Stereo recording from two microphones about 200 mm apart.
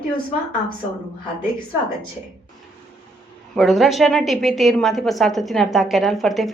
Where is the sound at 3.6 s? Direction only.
Centre (ahead or behind).